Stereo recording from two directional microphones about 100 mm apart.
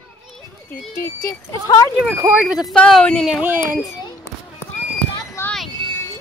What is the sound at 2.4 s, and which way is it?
Speech, 5° right (ahead or behind).